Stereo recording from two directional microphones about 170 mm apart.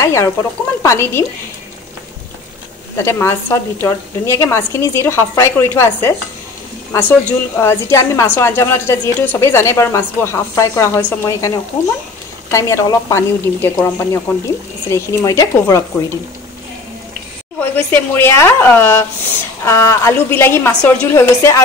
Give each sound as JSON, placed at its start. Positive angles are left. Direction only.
{"t": 0.0, "sound": "a woman's voice", "side_deg": 20}
{"t": 3.0, "sound": "a woman's voice", "side_deg": 15}
{"t": 17.6, "sound": "a woman's voice", "side_deg": 10}